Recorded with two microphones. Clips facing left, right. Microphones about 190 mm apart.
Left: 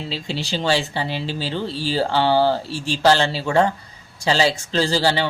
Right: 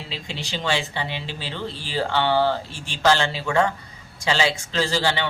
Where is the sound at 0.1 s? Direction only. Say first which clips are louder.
Left 5 dB; 35° left (ahead or behind).